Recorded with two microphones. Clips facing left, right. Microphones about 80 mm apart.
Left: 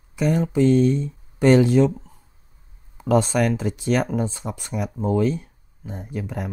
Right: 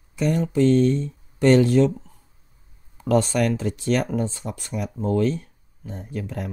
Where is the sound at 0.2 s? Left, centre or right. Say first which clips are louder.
Left 1 dB; centre.